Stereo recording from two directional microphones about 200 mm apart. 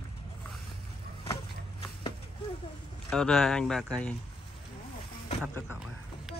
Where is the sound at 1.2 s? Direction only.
25° left (ahead or behind).